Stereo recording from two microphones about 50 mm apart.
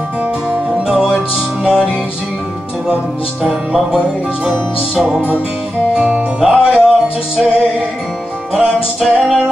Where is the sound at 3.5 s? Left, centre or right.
Centre.